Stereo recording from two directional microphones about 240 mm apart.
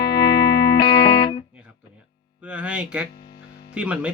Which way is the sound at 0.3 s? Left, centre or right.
Left.